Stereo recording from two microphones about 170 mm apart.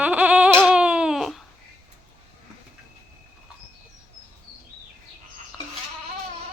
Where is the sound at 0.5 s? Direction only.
5° right (ahead or behind).